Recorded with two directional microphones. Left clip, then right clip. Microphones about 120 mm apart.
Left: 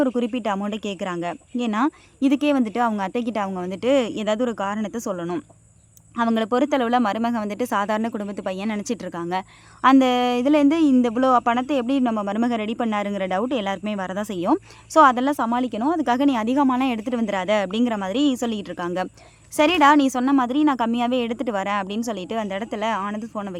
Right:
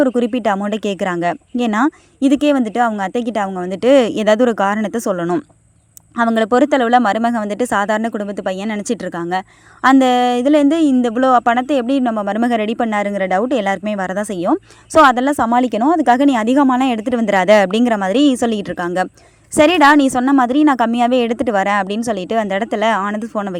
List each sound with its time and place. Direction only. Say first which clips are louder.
0.0 s speech: right 7 dB; 40° right (ahead or behind)
6.1 s speech: right 7 dB; 40° right (ahead or behind); by 23.6 s 55° right (ahead or behind)